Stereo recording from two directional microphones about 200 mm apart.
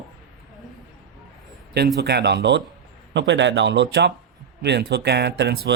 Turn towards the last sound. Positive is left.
turn(degrees=-55)  # may be behind; listen again after turning